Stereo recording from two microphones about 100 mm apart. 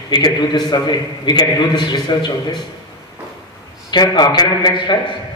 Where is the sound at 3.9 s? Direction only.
45° left (ahead or behind).